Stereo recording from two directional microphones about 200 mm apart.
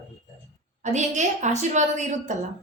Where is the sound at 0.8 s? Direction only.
35° right (ahead or behind).